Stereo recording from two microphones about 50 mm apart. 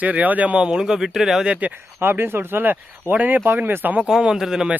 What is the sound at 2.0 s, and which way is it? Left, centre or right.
Speech, right.